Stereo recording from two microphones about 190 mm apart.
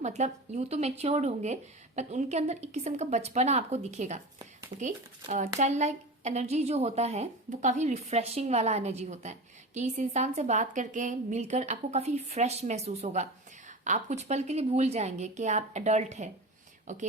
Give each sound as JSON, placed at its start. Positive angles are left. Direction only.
{"t": 0.0, "sound": "a woman's voice", "side_deg": -40}